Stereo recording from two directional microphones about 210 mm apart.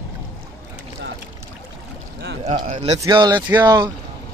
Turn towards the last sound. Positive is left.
turn(degrees=-20)  # may be behind; listen again after turning